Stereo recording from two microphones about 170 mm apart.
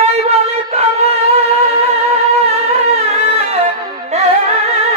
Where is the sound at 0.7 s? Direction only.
40° right (ahead or behind).